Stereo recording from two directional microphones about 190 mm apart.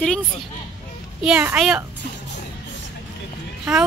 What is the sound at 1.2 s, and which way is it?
Speech, 5° right (ahead or behind).